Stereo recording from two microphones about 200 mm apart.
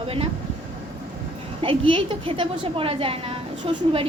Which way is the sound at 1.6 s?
25° right (ahead or behind).